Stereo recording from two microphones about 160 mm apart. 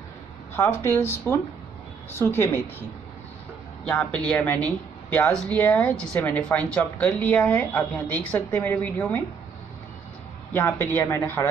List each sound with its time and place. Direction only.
0.6 s speech: 15° left (ahead or behind)
3.8 s speech: 5° left (ahead or behind)
10.5 s speech: 15° left (ahead or behind)